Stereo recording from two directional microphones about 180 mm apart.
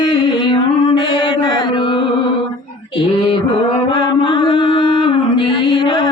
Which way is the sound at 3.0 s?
30° left (ahead or behind).